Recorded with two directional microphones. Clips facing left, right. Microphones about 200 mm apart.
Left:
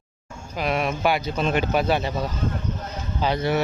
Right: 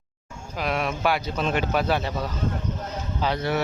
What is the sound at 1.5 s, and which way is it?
Speech, 5° left (ahead or behind).